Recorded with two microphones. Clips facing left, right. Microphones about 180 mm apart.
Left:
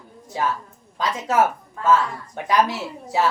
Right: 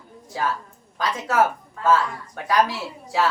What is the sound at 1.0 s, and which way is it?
A woman's voice, 20° left (ahead or behind).